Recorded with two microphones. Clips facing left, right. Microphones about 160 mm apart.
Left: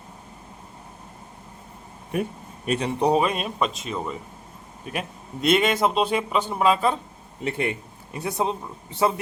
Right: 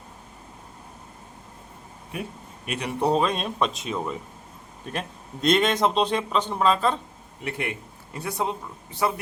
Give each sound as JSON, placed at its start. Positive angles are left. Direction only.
{"t": 2.6, "sound": "a man's voice", "side_deg": 30}
{"t": 3.0, "sound": "speech", "side_deg": 10}
{"t": 7.4, "sound": "a man's voice", "side_deg": 25}